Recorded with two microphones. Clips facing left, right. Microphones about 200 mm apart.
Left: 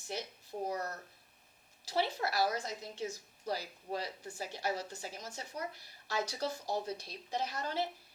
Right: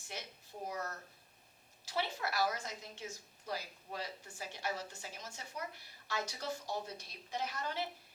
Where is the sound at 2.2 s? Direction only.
35° left (ahead or behind).